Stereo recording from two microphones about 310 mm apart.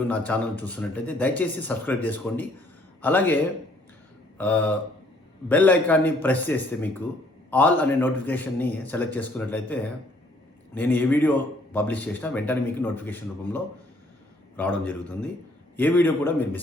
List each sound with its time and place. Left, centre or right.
0.3 s a man's voice: centre
4.4 s a man's voice: centre